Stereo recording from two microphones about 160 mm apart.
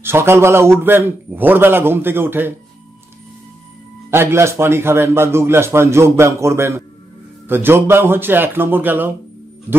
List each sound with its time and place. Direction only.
0.0 s a man's voice: 15° right (ahead or behind)
4.1 s a man's voice: 15° right (ahead or behind)